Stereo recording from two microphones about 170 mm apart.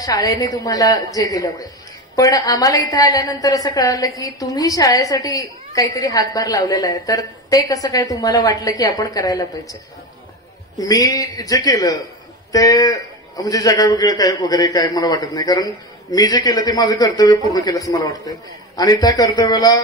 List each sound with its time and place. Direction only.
0.0 s a man's voice: 20° left (ahead or behind)
10.8 s a man's voice: 20° left (ahead or behind)